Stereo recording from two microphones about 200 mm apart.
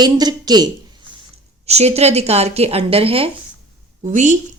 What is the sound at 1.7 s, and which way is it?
A woman's voice, 30° right (ahead or behind).